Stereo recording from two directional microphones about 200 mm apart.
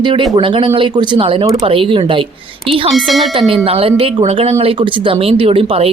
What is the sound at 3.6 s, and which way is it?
Speech, 30° right (ahead or behind).